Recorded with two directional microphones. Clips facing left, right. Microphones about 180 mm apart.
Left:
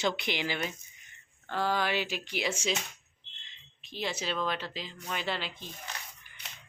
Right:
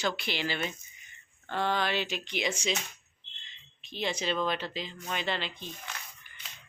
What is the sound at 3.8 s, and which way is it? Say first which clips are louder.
Speech: right 2 dB; 5° left (ahead or behind).